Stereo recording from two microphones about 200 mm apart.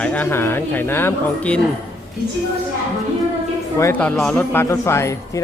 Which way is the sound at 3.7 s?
10° left (ahead or behind).